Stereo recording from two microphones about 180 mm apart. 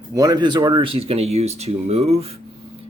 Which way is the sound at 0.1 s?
20° right (ahead or behind).